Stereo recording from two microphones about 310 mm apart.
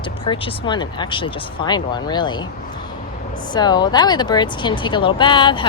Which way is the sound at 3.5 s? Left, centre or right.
Centre.